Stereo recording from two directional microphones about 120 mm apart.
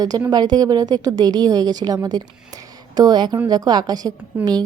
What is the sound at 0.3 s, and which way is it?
A woman's voice, 35° right (ahead or behind).